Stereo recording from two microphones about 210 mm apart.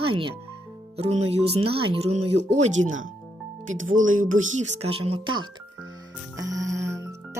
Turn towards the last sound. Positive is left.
turn(degrees=-15)  # may be behind; listen again after turning